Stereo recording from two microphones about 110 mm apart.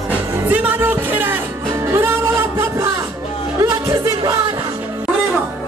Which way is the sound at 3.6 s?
30° right (ahead or behind).